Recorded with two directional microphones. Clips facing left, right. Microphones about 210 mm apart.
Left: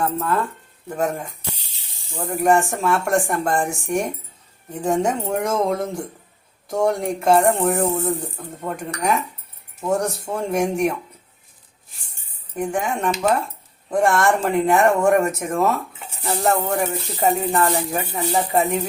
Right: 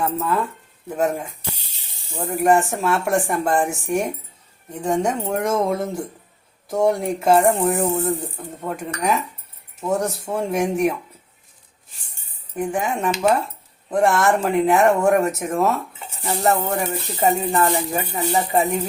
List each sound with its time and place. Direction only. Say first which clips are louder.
0.0 s speech: even; 5° right (ahead or behind)
12.5 s speech: even; 5° right (ahead or behind)